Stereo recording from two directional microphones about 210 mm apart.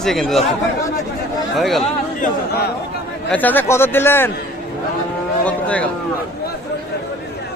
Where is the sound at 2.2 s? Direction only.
50° left (ahead or behind).